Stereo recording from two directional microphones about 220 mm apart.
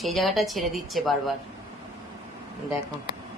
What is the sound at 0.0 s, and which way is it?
Speech, centre (ahead or behind).